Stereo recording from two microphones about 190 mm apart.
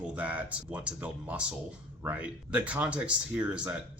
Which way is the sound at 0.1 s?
5° right (ahead or behind).